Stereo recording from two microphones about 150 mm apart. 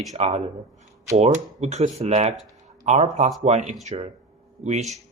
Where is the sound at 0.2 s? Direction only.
45° right (ahead or behind).